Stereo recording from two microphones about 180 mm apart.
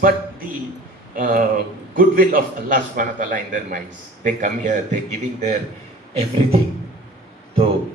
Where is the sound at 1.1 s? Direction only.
50° right (ahead or behind).